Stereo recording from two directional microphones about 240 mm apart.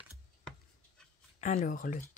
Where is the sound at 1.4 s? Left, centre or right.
Left.